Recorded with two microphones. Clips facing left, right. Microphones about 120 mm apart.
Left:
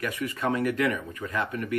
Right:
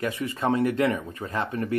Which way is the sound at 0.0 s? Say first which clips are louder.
Right 2 dB; 25° right (ahead or behind).